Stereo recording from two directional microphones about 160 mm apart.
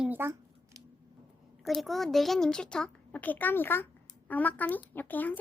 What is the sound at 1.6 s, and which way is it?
A child's voice, centre (ahead or behind).